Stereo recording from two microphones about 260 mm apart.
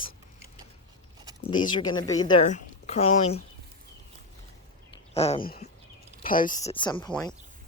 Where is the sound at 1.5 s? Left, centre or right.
Centre.